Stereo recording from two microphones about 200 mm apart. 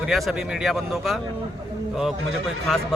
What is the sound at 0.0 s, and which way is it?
A man's voice, centre (ahead or behind).